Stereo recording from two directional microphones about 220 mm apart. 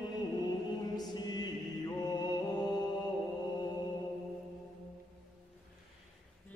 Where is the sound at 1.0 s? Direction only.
20° left (ahead or behind).